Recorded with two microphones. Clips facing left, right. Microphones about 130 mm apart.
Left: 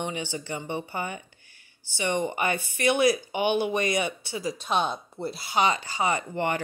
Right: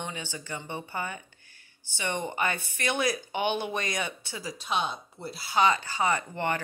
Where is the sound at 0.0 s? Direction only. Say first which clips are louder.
Left 6 dB; 15° left (ahead or behind).